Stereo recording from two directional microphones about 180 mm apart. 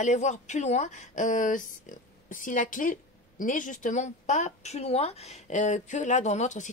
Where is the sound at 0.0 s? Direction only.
40° left (ahead or behind).